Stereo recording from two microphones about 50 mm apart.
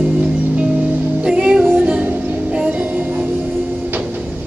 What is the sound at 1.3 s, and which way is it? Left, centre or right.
Music, centre.